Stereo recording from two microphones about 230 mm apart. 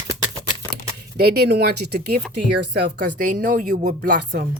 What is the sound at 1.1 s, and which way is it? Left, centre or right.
Speech, right.